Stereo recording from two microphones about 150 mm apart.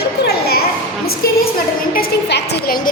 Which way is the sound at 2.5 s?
90° left.